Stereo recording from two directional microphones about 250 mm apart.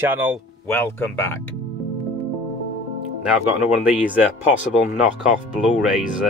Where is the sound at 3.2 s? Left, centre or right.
Centre.